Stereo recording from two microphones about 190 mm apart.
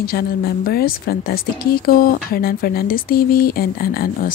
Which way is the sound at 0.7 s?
55° left (ahead or behind).